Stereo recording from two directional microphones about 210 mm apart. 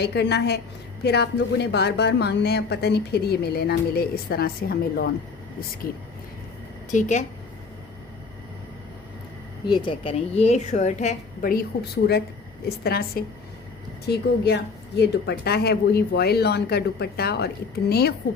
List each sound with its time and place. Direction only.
0.0 s a woman's voice: 55° left (ahead or behind); by 7.3 s 35° left (ahead or behind)
9.6 s a woman's voice: 20° left (ahead or behind); by 18.1 s 50° left (ahead or behind)